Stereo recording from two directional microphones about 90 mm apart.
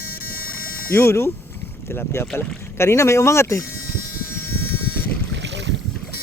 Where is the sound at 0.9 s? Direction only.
30° left (ahead or behind).